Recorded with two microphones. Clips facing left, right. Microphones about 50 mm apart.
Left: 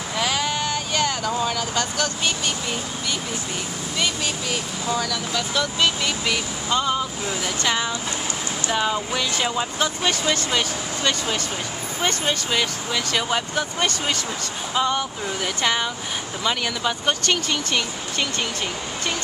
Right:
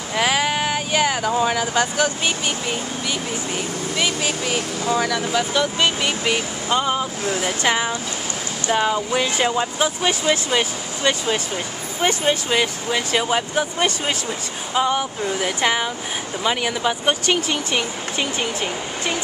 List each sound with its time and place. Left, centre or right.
0.1 s vehicle: right
4.0 s speech: centre
9.6 s speech: centre